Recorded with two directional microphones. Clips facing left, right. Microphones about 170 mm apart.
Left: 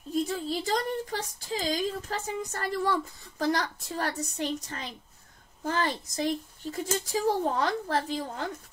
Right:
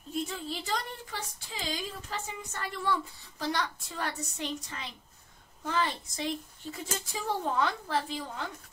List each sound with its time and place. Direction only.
0.1 s speech: 40° left (ahead or behind)